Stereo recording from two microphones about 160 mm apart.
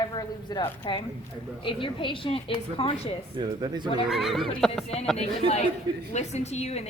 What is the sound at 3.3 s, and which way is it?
Speech, 25° right (ahead or behind).